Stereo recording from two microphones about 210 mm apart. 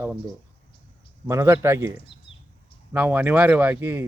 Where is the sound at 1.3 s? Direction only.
10° right (ahead or behind).